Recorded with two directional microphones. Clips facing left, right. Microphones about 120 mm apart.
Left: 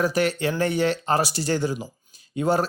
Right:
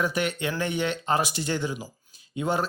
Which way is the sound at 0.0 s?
35° left (ahead or behind).